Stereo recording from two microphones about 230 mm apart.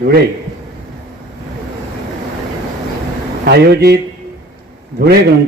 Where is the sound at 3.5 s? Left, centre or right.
Right.